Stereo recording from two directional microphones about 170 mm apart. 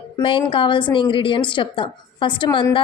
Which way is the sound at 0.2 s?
30° left (ahead or behind).